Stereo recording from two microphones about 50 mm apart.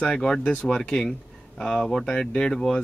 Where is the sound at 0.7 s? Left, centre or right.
Centre.